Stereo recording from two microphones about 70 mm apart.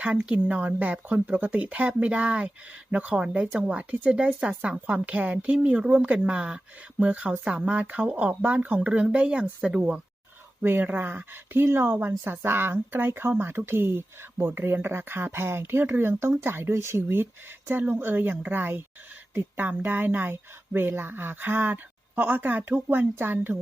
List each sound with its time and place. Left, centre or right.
0.0 s speech: centre
10.6 s speech: right